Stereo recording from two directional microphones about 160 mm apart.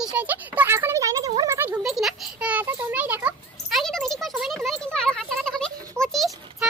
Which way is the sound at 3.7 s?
Centre (ahead or behind).